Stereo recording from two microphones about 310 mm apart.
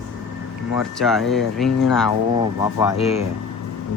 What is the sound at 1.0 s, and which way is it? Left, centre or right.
Speech, centre.